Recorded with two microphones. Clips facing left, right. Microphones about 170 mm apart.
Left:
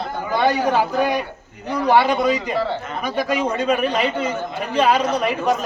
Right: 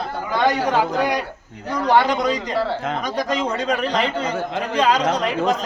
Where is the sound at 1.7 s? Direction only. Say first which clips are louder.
Left 1 dB; 10° left (ahead or behind).